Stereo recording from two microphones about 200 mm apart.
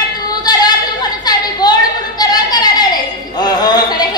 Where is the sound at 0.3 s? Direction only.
20° left (ahead or behind).